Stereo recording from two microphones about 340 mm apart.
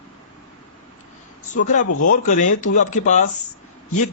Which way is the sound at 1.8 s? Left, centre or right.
Left.